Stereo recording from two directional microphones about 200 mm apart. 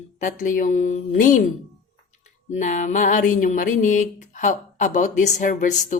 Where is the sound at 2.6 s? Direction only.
40° left (ahead or behind).